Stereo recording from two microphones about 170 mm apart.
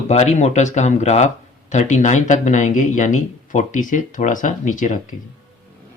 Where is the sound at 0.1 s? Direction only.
40° left (ahead or behind).